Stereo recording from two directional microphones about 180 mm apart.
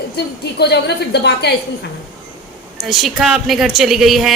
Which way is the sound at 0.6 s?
70° left (ahead or behind).